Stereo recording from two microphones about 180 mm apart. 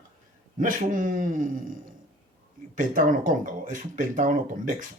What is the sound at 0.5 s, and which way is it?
Speech, 50° right (ahead or behind).